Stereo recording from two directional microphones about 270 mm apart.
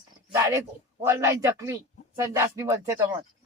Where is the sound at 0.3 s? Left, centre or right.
Centre.